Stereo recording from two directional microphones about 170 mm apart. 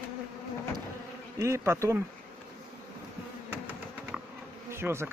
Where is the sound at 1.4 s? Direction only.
15° right (ahead or behind).